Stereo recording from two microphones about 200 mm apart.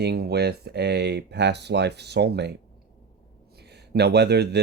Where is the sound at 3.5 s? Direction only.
55° right (ahead or behind).